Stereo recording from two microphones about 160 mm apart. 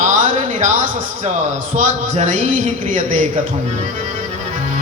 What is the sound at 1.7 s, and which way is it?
A man's voice, 50° right (ahead or behind).